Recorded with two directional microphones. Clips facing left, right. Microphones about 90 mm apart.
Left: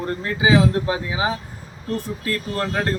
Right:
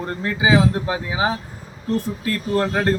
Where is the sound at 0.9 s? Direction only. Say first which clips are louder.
Right 1 dB; 25° right (ahead or behind).